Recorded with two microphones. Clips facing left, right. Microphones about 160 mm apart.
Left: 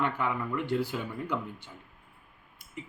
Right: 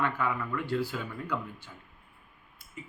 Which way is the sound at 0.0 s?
20° left (ahead or behind).